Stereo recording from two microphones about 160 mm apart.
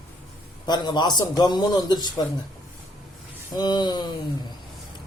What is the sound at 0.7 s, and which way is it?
A man's voice, 25° left (ahead or behind).